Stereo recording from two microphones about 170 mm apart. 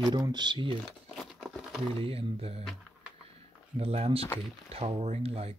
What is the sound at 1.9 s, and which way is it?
Speech, 35° right (ahead or behind).